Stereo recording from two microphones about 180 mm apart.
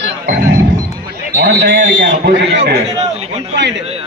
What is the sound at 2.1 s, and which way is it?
Speech, 75° right (ahead or behind).